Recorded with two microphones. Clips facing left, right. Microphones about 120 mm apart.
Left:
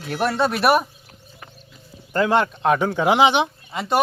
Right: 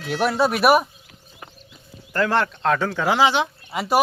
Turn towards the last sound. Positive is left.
turn(degrees=-5)  # may be behind; listen again after turning